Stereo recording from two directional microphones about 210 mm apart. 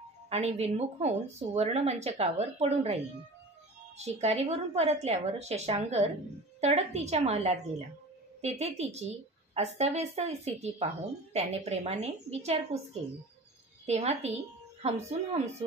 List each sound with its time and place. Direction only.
0.3 s a woman's voice: 30° right (ahead or behind)
4.0 s a woman's voice: 30° right (ahead or behind)
13.8 s a woman's voice: 30° right (ahead or behind)